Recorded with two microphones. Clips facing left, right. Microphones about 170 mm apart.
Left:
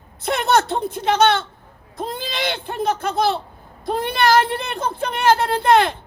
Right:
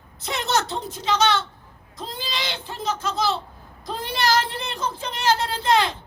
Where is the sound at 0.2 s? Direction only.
60° left (ahead or behind).